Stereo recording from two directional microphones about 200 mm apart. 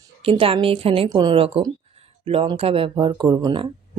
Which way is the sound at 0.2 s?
30° right (ahead or behind).